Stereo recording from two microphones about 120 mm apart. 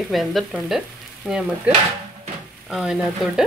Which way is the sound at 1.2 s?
5° right (ahead or behind).